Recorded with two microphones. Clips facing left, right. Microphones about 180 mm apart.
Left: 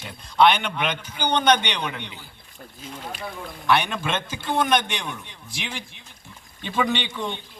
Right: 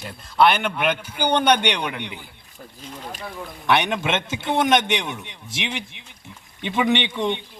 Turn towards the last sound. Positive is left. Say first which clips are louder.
# right 6 dB
turn(degrees=-20)  # may be behind; listen again after turning